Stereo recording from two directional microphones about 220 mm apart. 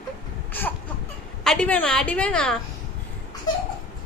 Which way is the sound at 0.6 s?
10° left (ahead or behind).